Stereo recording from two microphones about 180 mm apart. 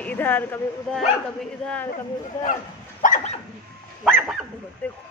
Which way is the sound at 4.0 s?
5° right (ahead or behind).